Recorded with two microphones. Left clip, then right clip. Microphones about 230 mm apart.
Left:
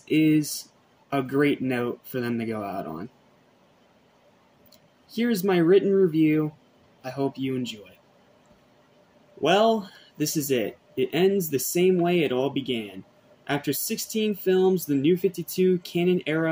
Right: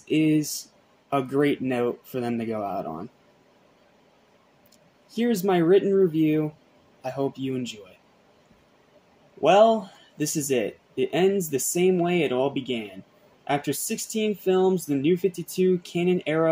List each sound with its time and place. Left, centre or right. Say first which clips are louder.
0.1 s speech: left 1 dB; centre
5.1 s speech: right 1 dB; centre
9.4 s speech: right 3 dB; centre